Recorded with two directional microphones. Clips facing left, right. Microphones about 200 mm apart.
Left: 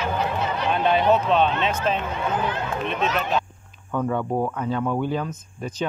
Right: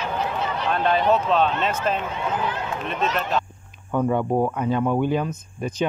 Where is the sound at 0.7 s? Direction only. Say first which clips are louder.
Left 1 dB; 5° left (ahead or behind).